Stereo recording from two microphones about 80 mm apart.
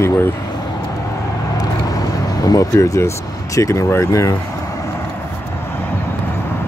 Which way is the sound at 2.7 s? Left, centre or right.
Left.